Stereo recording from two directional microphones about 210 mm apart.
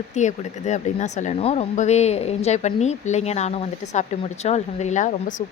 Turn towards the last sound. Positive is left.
turn(degrees=35)  # may be behind; listen again after turning